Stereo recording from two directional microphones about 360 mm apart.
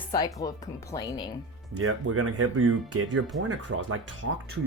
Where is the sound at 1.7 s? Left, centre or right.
Right.